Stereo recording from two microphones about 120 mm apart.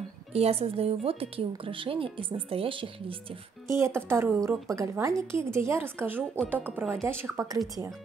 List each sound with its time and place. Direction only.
0.3 s a woman's voice: 55° right (ahead or behind)
3.6 s a woman's voice: 20° right (ahead or behind)